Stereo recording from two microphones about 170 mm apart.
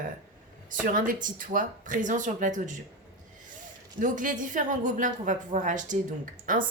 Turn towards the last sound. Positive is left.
turn(degrees=-50)  # may be behind; listen again after turning